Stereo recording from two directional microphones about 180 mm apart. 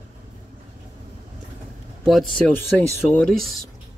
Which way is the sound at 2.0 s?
Centre (ahead or behind).